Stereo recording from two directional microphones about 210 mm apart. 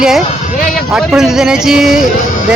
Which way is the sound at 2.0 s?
40° left (ahead or behind).